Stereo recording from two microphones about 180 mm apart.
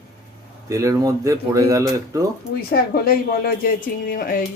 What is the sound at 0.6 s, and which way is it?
A man's voice, 15° right (ahead or behind).